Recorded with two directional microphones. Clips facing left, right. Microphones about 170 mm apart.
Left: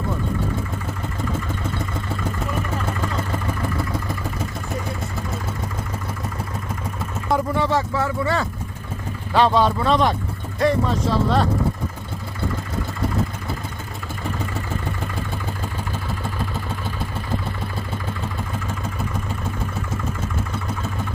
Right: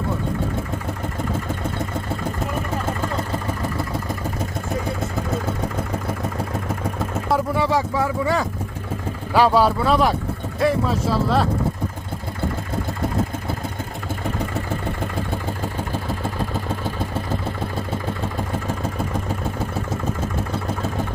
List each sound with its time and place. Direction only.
7.3 s vehicle: 5° right (ahead or behind)
9.3 s speech: 10° right (ahead or behind)